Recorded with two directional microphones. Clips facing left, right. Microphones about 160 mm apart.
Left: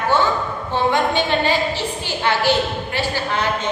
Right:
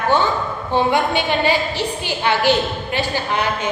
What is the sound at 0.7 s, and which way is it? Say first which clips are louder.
A woman's voice: right 1 dB; 15° right (ahead or behind).